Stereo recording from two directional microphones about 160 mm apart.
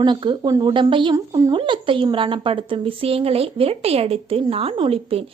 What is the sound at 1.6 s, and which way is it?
A woman's voice, 35° right (ahead or behind).